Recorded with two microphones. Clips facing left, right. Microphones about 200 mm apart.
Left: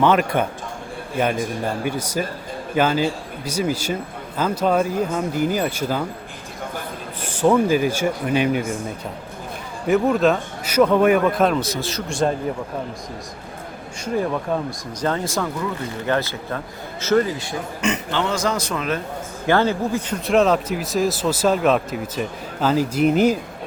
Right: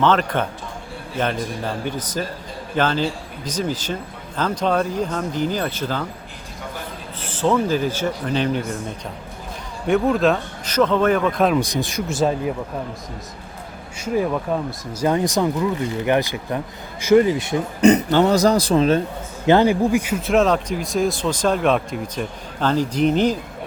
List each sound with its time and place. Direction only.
0.0 s speech: 10° left (ahead or behind)
7.2 s speech: 15° left (ahead or behind)
9.8 s speech: centre (ahead or behind)
11.6 s a man's voice: 15° right (ahead or behind)
12.0 s speech: 5° right (ahead or behind)
14.0 s a man's voice: 5° right (ahead or behind)
17.7 s a man's voice: 35° right (ahead or behind)
19.5 s a man's voice: 15° right (ahead or behind)
20.2 s speech: centre (ahead or behind)